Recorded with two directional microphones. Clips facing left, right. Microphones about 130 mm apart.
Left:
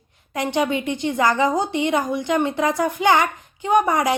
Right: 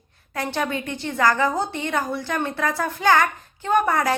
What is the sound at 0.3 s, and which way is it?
A woman's voice, 15° left (ahead or behind).